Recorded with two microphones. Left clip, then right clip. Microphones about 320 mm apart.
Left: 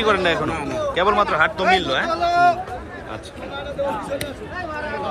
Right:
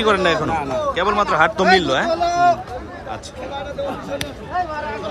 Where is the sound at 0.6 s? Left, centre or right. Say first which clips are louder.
Right 3 dB; right.